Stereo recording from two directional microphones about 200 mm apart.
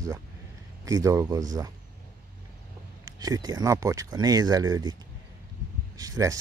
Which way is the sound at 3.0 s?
20° right (ahead or behind).